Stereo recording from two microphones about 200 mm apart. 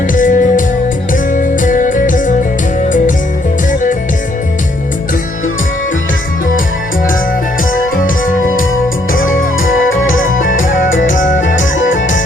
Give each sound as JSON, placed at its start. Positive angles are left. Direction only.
{"t": 0.1, "sound": "music", "side_deg": 40}
{"t": 7.7, "sound": "music", "side_deg": 45}
{"t": 9.6, "sound": "music", "side_deg": 80}
{"t": 10.3, "sound": "music", "side_deg": 45}
{"t": 10.9, "sound": "music", "side_deg": 70}